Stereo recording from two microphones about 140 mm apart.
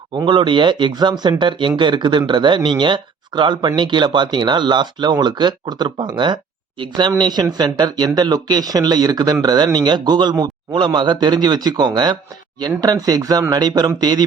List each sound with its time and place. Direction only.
0.1 s speech: 35° right (ahead or behind)